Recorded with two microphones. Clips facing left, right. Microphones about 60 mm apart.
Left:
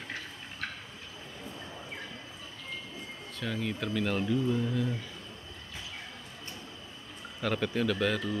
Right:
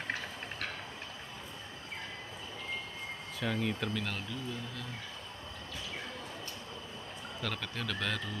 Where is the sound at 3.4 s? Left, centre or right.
Centre.